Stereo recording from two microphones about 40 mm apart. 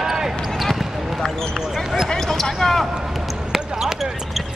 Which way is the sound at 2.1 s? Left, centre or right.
Centre.